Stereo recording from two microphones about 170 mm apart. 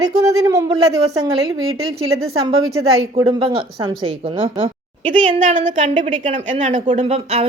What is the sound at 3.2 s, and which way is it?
A woman's voice, 30° right (ahead or behind).